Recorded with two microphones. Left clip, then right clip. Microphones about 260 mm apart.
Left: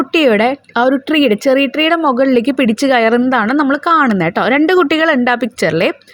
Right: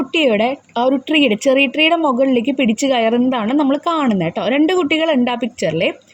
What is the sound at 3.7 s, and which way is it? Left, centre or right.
Speech, centre.